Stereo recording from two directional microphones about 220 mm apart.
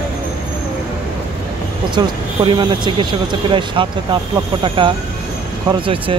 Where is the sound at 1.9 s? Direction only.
20° right (ahead or behind).